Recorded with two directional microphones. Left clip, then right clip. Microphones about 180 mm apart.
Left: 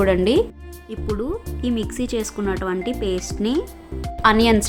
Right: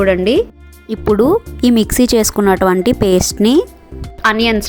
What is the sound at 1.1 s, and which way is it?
Speech, 45° right (ahead or behind).